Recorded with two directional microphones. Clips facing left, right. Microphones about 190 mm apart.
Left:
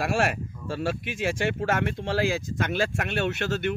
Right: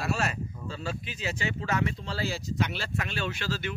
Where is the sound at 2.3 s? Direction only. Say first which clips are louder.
Left 3 dB; 50° left (ahead or behind).